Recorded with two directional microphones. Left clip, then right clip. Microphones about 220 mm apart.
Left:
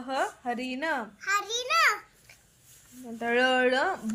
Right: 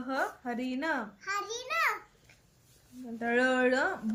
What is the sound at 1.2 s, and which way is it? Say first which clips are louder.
Speech: left 7 dB; 10° right (ahead or behind).